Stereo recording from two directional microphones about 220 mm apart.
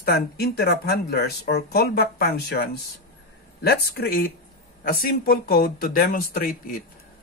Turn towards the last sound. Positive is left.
turn(degrees=40)  # may be behind; listen again after turning